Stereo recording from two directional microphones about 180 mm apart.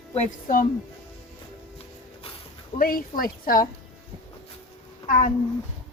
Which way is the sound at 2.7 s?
50° left (ahead or behind).